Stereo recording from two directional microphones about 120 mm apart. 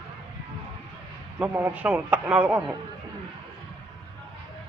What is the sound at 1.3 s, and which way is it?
Speech, 10° right (ahead or behind).